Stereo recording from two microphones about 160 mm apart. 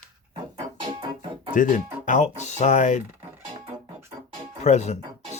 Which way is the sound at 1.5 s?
55° left (ahead or behind).